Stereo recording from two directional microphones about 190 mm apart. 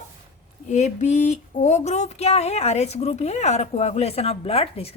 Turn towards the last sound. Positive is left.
turn(degrees=30)  # may be behind; listen again after turning